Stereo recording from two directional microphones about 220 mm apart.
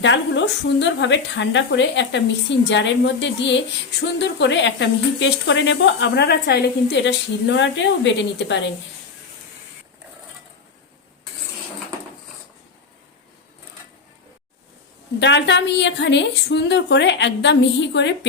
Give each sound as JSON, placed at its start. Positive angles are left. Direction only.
{"t": 0.0, "sound": "speech", "side_deg": 55}
{"t": 15.2, "sound": "speech", "side_deg": 55}